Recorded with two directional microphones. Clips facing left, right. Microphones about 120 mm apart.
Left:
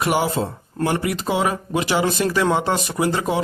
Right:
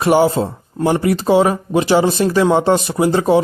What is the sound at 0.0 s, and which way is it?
Speech, 30° right (ahead or behind).